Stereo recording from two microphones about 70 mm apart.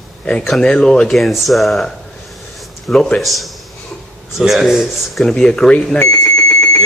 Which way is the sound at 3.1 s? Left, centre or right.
Centre.